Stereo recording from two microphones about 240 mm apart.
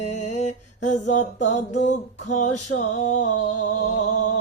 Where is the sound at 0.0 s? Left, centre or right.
Left.